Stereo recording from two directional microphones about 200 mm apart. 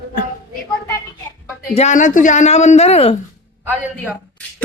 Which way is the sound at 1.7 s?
35° left (ahead or behind).